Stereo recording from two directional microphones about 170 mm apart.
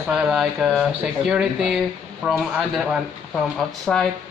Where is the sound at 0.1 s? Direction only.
Centre (ahead or behind).